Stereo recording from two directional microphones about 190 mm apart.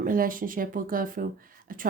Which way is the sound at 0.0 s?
45° right (ahead or behind).